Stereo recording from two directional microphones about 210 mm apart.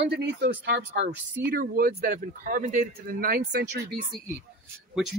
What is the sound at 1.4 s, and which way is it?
A man's voice, 50° right (ahead or behind).